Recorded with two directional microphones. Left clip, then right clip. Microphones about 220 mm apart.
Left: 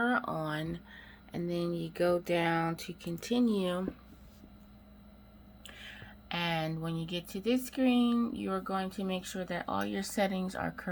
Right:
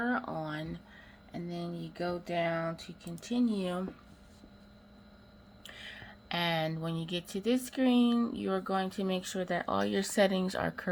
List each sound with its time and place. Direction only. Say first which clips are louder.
0.0 s a sound: left 3 dB; 10° left (ahead or behind)
1.3 s speech: left 6 dB; 30° left (ahead or behind)
5.6 s speech: right 2 dB; 5° right (ahead or behind)